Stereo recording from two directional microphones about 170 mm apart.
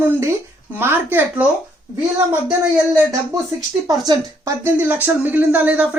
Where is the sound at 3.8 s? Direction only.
20° right (ahead or behind).